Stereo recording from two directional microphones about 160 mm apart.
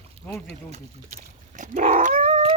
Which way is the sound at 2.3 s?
35° right (ahead or behind).